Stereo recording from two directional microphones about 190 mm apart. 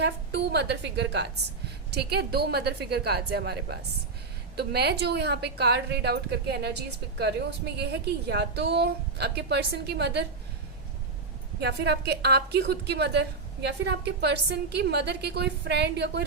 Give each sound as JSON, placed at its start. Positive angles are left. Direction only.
{"t": 0.0, "sound": "a woman's voice", "side_deg": -60}
{"t": 11.6, "sound": "a woman's voice", "side_deg": -60}